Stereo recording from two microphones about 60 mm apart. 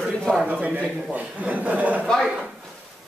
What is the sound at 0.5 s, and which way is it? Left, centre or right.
Speech, right.